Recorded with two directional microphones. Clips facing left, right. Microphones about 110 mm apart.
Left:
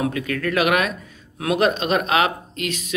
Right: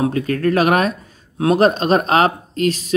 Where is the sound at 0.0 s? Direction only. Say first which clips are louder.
Right 6 dB; 35° right (ahead or behind).